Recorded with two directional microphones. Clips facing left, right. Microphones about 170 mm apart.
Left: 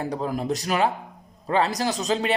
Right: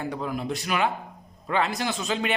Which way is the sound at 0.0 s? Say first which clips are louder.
Left 3 dB; 35° left (ahead or behind).